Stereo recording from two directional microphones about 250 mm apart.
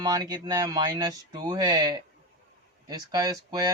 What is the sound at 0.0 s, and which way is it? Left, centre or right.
Speech, centre.